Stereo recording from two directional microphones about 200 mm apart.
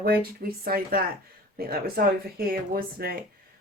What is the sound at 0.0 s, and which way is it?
Speech, 50° right (ahead or behind).